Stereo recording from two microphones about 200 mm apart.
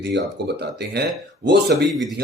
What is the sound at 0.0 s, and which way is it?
A man's voice, 55° right (ahead or behind).